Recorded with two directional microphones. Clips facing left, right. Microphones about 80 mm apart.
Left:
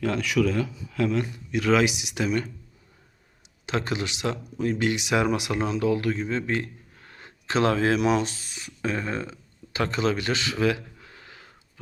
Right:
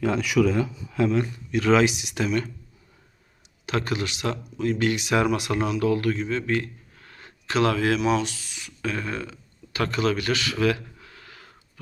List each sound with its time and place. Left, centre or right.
0.0 s a man's voice: centre
0.9 s a sound: centre
1.6 s speech: centre
1.9 s speech: centre
3.7 s speech: left
6.2 s a sound: left
7.4 s speech: left